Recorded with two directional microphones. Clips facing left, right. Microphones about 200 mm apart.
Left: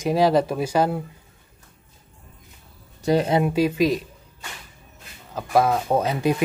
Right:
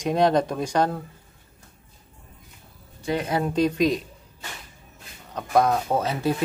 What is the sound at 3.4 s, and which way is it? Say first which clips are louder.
Speech: left 1 dB; 5° left (ahead or behind).